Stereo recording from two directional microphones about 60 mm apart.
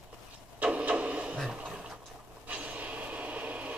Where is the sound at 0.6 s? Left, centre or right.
Right.